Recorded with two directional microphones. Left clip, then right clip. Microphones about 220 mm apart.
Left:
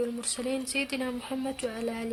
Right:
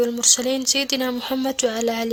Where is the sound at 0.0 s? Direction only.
35° right (ahead or behind).